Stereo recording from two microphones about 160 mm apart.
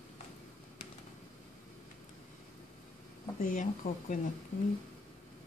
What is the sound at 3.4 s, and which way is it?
Speech, 55° left (ahead or behind).